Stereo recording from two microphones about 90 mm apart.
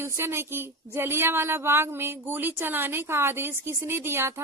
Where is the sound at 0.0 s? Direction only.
25° right (ahead or behind).